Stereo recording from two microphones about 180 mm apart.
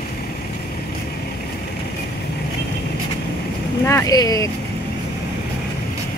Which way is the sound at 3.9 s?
20° left (ahead or behind).